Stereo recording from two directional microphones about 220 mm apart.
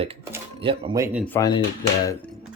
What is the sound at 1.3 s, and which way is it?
Speech, 15° left (ahead or behind).